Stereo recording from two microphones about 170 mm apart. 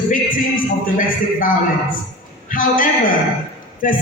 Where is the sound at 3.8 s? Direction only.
50° left (ahead or behind).